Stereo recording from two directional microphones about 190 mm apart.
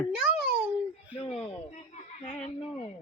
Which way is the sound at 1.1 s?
30° left (ahead or behind).